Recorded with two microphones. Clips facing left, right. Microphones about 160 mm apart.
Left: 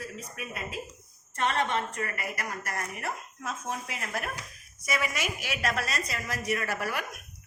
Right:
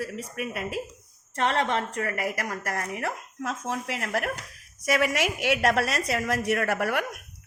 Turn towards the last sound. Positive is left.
turn(degrees=-60)  # may be behind; listen again after turning